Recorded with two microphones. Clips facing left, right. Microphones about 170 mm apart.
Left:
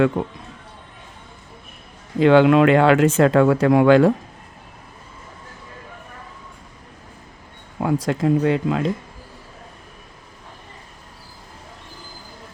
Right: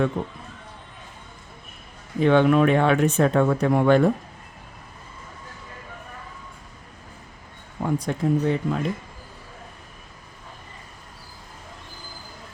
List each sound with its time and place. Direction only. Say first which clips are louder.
2.1 s speech: left 4 dB; 90° left
7.8 s speech: left 4 dB; 90° left